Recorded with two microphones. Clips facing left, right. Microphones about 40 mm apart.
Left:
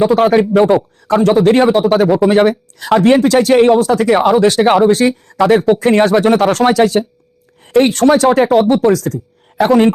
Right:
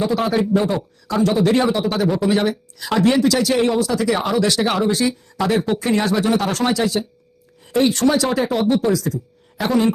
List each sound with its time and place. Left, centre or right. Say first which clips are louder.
0.0 s speech: left 9 dB; left